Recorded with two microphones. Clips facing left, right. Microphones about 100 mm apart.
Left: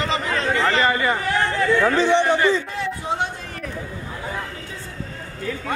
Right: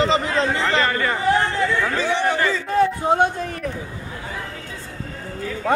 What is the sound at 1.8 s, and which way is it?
Speech, 25° left (ahead or behind).